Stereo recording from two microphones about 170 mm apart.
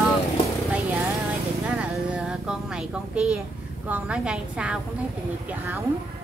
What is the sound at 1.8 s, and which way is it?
A woman's voice, 5° right (ahead or behind).